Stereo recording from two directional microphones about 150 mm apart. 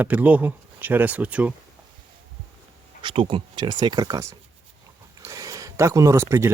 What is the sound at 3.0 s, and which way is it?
Speech, 35° right (ahead or behind).